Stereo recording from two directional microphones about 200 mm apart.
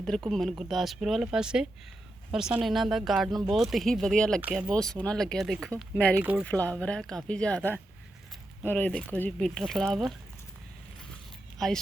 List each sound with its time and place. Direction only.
0.0 s speech: centre (ahead or behind)
11.5 s speech: centre (ahead or behind)